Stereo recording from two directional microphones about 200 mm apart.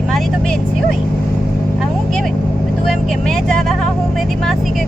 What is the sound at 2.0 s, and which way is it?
Vehicle, centre (ahead or behind).